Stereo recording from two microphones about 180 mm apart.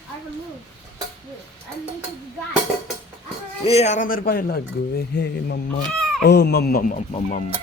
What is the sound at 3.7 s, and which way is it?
Speech, 35° left (ahead or behind).